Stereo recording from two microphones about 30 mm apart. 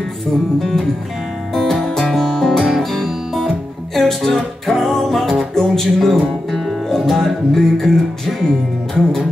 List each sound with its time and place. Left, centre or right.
0.6 s music: centre
8.3 s music: centre